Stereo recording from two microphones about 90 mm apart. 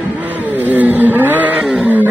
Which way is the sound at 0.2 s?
20° right (ahead or behind).